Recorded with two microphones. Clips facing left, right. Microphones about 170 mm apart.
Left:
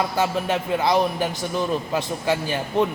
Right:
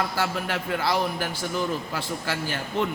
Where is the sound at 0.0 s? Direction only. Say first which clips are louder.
Left 5 dB; 20° left (ahead or behind).